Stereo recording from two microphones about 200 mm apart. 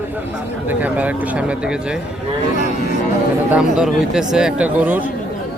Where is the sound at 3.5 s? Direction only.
5° right (ahead or behind).